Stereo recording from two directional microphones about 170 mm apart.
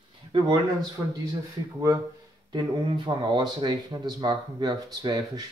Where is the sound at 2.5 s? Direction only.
25° right (ahead or behind).